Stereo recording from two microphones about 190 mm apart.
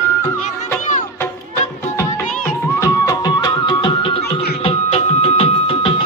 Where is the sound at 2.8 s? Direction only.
20° left (ahead or behind).